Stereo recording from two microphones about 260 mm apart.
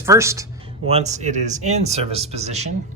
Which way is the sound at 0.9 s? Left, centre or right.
Right.